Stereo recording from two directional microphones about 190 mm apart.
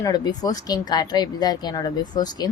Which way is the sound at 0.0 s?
20° left (ahead or behind).